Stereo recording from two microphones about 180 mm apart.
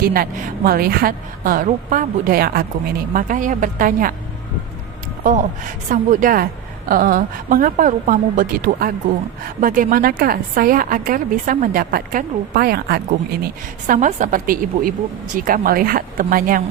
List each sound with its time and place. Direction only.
0.0 s a woman's voice: 55° right (ahead or behind)
5.9 s a woman's voice: 50° right (ahead or behind)
13.8 s a woman's voice: 45° right (ahead or behind)